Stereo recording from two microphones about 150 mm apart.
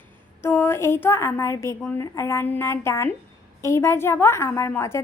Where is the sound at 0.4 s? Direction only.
15° left (ahead or behind).